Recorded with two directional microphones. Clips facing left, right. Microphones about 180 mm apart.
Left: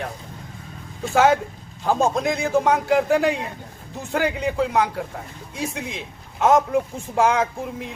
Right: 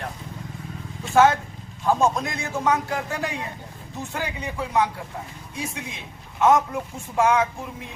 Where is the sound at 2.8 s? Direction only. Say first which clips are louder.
Left 10 dB; 90° left.